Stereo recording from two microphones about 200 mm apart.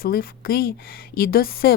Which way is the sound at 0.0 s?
45° left (ahead or behind).